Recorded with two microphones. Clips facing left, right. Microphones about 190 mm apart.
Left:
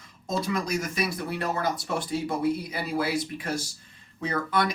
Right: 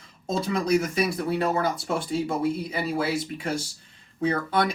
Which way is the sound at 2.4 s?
25° right (ahead or behind).